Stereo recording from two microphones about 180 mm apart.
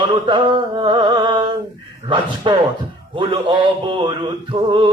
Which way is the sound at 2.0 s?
25° right (ahead or behind).